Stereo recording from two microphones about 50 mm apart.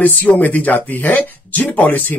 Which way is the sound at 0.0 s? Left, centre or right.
Left.